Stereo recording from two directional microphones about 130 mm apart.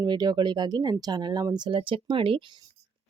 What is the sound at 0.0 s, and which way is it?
Speech, 35° right (ahead or behind).